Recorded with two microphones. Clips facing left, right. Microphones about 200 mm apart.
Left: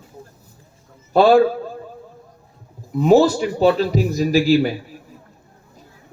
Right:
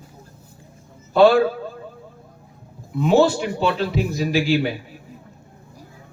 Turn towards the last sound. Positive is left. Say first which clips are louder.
# left 4 dB
turn(degrees=40)  # may be behind; listen again after turning